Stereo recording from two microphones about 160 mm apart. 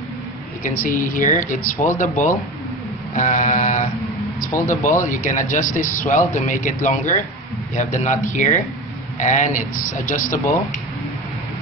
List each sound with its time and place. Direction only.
0.7 s speech: 55° left (ahead or behind)